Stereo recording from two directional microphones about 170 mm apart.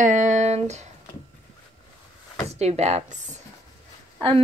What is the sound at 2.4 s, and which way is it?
Speech, 40° right (ahead or behind).